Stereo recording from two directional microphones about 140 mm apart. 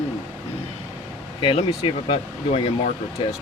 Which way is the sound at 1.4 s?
40° left (ahead or behind).